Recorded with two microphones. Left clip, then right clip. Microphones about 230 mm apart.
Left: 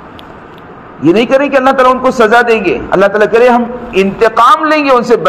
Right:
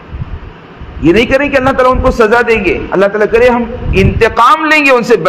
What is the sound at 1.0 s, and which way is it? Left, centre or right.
A man's voice, right.